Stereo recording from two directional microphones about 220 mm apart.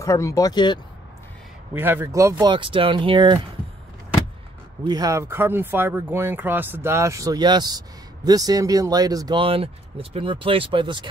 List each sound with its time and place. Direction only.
0.0 s speech: 15° left (ahead or behind)
1.7 s speech: 10° right (ahead or behind)
4.8 s speech: 15° right (ahead or behind)